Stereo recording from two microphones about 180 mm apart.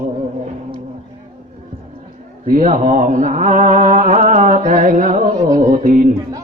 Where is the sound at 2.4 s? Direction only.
45° right (ahead or behind).